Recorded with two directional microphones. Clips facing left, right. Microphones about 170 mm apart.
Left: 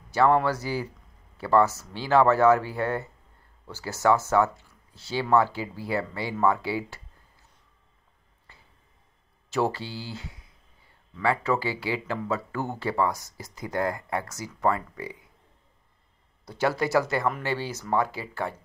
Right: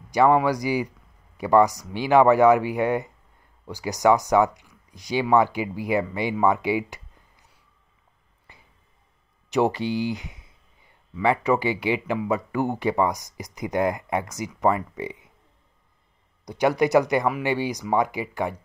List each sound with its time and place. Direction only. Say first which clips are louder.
0.1 s speech: right 3 dB; 15° right (ahead or behind)
8.5 s a sound: right 3 dB; 15° right (ahead or behind)
9.5 s speech: right 5 dB; 20° right (ahead or behind)
16.4 s speech: right 5 dB; 15° right (ahead or behind)